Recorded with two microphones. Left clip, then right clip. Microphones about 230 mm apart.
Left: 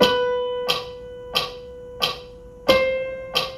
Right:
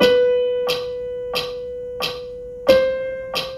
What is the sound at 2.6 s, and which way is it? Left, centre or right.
Music, centre.